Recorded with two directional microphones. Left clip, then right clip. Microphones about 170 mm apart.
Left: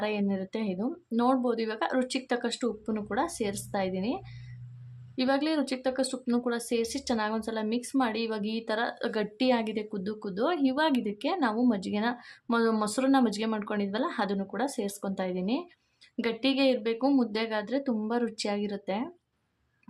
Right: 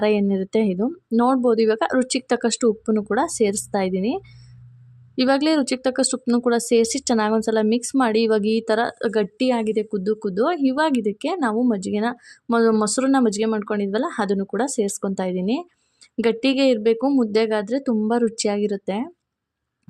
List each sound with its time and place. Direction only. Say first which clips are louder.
0.0 s speech: right 11 dB; 45° right (ahead or behind)